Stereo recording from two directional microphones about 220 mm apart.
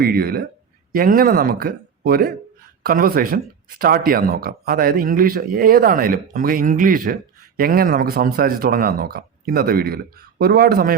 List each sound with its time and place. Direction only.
0.0 s speech: 45° right (ahead or behind)